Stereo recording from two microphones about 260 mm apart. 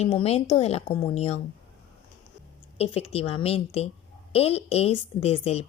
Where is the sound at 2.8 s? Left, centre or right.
Left.